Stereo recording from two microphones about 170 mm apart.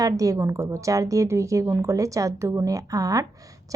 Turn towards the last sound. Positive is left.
turn(degrees=-20)  # may be behind; listen again after turning